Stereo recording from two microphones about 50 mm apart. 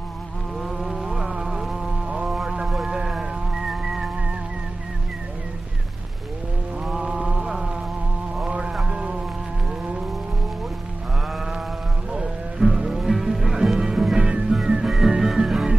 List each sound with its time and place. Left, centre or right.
0.7 s music: centre
6.9 s a sound: centre
8.5 s music: right
12.1 s music: centre